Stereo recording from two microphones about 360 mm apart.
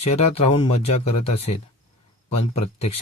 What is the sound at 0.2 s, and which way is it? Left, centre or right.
Speech, centre.